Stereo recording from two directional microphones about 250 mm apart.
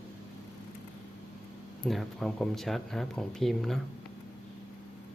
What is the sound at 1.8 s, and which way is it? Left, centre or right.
Speech, centre.